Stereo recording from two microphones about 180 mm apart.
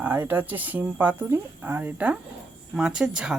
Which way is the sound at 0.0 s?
10° right (ahead or behind).